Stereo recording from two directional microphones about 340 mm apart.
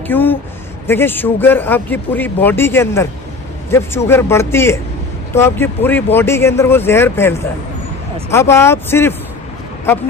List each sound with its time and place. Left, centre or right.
0.1 s speech: centre